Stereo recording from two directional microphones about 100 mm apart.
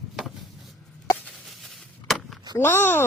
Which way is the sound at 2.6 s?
20° left (ahead or behind).